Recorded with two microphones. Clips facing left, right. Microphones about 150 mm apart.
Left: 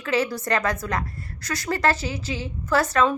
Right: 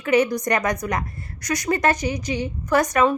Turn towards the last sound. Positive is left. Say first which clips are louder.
# right 2 dB
turn(degrees=-15)  # may be behind; listen again after turning